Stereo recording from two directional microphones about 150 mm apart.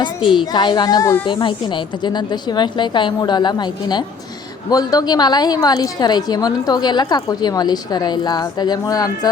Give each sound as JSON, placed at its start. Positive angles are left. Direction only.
{"t": 0.5, "sound": "a woman's voice", "side_deg": 30}